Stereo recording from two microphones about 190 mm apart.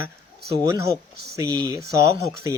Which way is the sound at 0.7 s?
15° right (ahead or behind).